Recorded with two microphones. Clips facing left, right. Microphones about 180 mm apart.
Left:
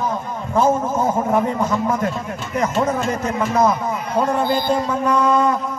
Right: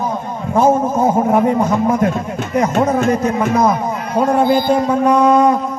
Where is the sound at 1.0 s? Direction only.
15° right (ahead or behind).